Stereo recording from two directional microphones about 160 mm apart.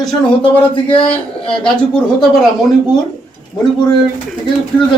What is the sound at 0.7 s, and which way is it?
Speech, 35° left (ahead or behind).